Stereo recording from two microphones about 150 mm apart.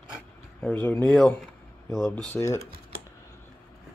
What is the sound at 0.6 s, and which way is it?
Speech, 15° left (ahead or behind).